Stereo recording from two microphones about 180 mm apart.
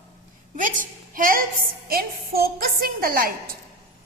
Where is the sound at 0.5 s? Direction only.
50° right (ahead or behind).